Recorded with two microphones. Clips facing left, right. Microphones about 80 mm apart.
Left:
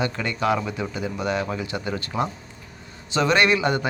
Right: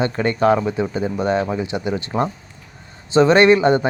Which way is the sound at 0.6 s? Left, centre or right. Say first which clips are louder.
Right 7 dB; right.